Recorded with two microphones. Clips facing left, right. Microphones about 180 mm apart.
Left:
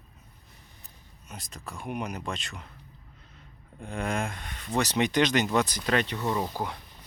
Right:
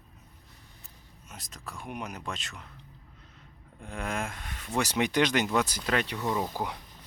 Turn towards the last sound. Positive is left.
turn(degrees=-15)  # may be behind; listen again after turning